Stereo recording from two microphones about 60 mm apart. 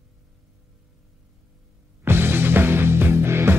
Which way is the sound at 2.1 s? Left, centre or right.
Right.